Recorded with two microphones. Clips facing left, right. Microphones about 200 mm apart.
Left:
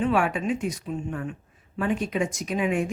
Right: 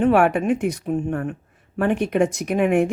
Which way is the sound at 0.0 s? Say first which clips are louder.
Right 7 dB; 60° right (ahead or behind).